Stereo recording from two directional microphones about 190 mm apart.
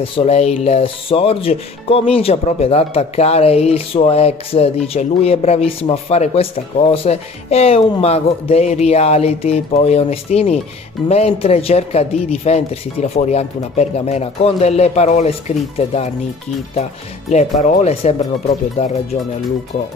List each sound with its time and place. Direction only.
0.0 s speech: 30° left (ahead or behind)
17.3 s speech: 35° left (ahead or behind)